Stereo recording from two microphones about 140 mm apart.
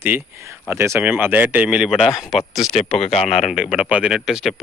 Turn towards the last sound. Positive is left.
turn(degrees=0)  # may be behind; listen again after turning